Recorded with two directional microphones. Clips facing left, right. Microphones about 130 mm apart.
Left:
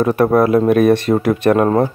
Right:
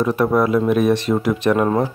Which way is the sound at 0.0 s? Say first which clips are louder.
Left 4 dB; 55° left (ahead or behind).